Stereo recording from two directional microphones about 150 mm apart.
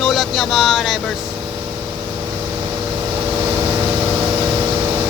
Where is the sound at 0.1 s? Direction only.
Centre (ahead or behind).